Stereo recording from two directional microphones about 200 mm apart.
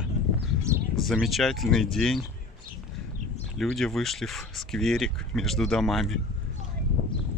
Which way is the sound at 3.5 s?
Centre (ahead or behind).